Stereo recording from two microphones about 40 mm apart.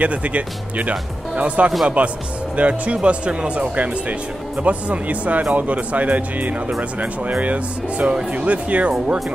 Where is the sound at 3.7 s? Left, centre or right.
Right.